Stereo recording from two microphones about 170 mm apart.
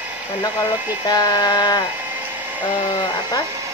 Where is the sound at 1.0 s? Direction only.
25° left (ahead or behind).